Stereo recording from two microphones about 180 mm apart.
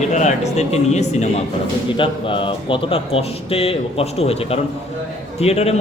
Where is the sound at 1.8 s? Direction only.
25° left (ahead or behind).